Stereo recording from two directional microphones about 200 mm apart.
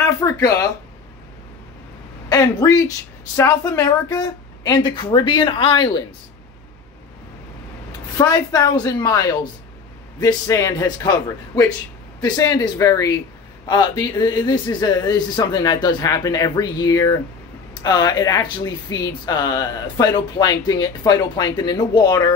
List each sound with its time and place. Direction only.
0.2 s a man's voice: 15° left (ahead or behind)
2.2 s speech: 15° left (ahead or behind)
8.2 s a man's voice: 20° left (ahead or behind)